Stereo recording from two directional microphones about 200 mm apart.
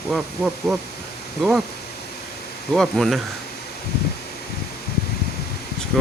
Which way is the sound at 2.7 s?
Centre (ahead or behind).